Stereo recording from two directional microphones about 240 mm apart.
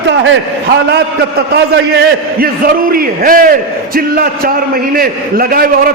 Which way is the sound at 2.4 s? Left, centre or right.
Right.